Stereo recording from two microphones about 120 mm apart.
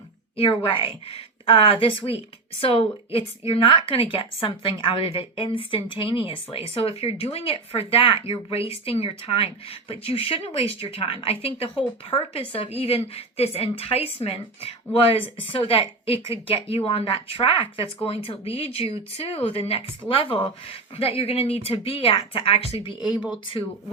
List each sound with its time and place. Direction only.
0.3 s a woman's voice: 45° left (ahead or behind)
20.9 s a woman's voice: 55° left (ahead or behind)
23.0 s speech: 5° right (ahead or behind)